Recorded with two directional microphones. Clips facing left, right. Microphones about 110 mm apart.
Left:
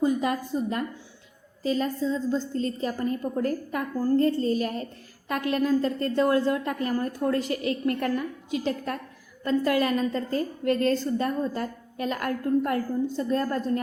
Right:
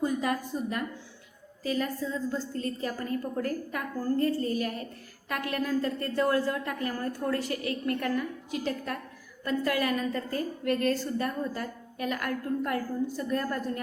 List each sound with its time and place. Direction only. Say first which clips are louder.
0.0 s a woman's voice: left 4 dB; 20° left (ahead or behind)